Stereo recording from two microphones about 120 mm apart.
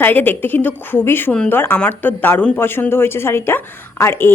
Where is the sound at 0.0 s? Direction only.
15° left (ahead or behind).